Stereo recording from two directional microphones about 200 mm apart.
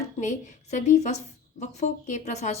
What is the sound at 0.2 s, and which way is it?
A woman's voice, 35° left (ahead or behind).